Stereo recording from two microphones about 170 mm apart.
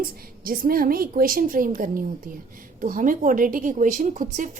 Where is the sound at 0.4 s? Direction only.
60° right (ahead or behind).